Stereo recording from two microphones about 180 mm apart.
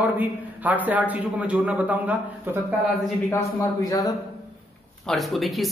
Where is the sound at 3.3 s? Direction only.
15° left (ahead or behind).